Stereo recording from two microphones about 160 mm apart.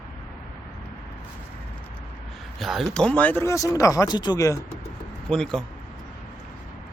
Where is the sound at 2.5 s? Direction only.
Centre (ahead or behind); by 4.6 s 20° left (ahead or behind).